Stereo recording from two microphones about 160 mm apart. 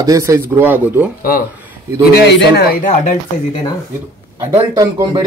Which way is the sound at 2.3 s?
90° left.